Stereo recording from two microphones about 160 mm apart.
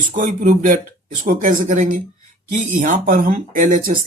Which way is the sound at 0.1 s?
55° right (ahead or behind).